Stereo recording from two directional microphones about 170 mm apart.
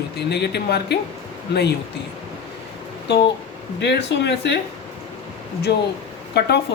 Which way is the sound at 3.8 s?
90° left.